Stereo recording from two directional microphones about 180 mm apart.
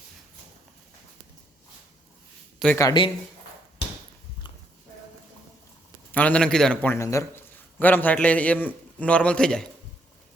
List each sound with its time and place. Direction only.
2.7 s speech: 25° left (ahead or behind)
6.1 s a man's voice: 10° left (ahead or behind)